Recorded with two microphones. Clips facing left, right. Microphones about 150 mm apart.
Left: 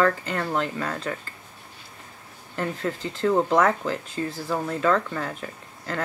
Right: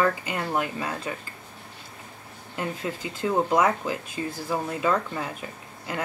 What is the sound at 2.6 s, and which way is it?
Speech, 15° right (ahead or behind).